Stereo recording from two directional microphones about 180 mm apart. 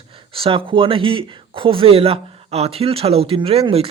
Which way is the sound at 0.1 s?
30° right (ahead or behind).